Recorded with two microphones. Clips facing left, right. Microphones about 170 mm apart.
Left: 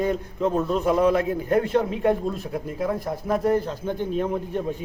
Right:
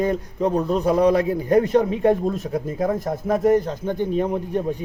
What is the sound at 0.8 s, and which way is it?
Speech, 40° right (ahead or behind).